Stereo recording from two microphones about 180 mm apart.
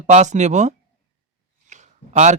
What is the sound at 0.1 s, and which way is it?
Speech, 40° right (ahead or behind).